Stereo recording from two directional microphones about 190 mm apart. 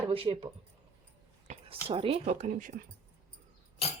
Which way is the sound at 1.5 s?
30° right (ahead or behind).